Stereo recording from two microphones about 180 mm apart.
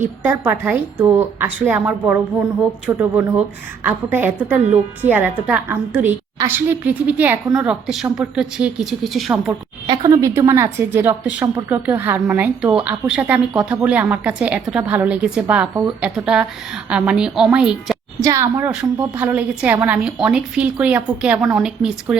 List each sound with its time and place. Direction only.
0.0 s a woman's voice: 10° right (ahead or behind)
9.8 s a woman's voice: 25° right (ahead or behind); by 17.9 s 5° right (ahead or behind)
18.2 s a woman's voice: 15° right (ahead or behind)